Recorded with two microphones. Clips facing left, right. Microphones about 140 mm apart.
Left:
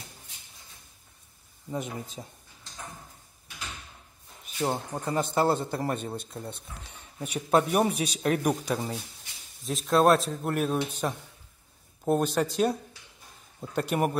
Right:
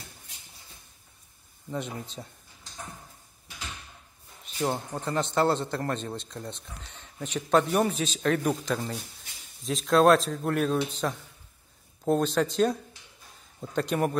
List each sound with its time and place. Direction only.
1.7 s a man's voice: 5° left (ahead or behind)
4.6 s a man's voice: 10° left (ahead or behind)